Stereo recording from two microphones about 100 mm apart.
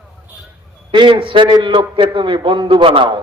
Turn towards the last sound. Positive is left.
turn(degrees=-60)  # may be behind; listen again after turning